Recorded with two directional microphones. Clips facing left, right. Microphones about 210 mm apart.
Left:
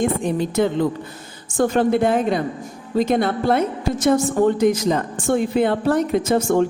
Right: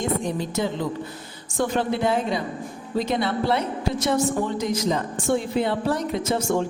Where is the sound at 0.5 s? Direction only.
55° left (ahead or behind).